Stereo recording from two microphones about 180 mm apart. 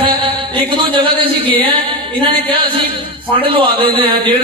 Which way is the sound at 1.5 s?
30° right (ahead or behind).